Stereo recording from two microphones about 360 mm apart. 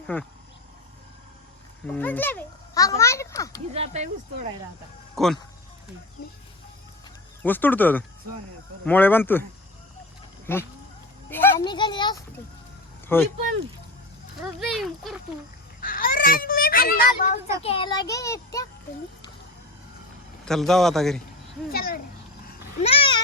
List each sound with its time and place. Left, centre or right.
0.1 s speech: centre
1.9 s a child's voice: centre
3.8 s speech: centre
5.1 s speech: centre
7.4 s speech: centre
10.4 s a child's voice: centre
14.6 s speech: centre
15.8 s a child's voice: left
20.4 s speech: centre
21.7 s a child's voice: left